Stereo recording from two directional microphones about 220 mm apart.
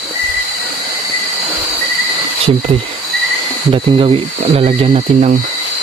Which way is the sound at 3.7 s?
25° right (ahead or behind).